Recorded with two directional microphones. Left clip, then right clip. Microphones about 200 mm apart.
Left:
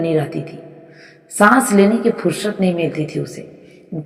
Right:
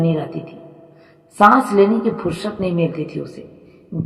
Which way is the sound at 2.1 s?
20° left (ahead or behind).